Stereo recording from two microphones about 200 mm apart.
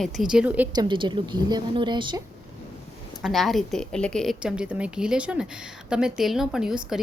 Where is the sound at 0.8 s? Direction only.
25° right (ahead or behind).